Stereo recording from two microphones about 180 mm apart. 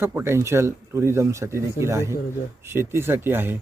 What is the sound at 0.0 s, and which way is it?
Speech, 15° right (ahead or behind).